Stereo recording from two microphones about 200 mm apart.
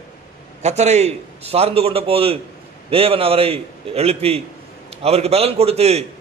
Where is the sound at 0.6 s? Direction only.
35° right (ahead or behind).